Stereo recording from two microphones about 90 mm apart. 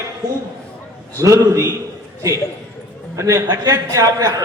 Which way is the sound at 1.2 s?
35° right (ahead or behind).